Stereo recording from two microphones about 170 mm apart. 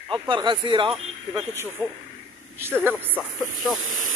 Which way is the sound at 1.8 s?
15° left (ahead or behind).